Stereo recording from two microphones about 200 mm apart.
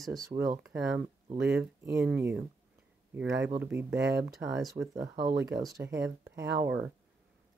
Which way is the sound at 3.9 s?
60° right (ahead or behind).